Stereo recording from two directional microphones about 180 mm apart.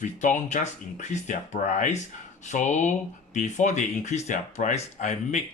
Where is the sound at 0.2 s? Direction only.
45° left (ahead or behind).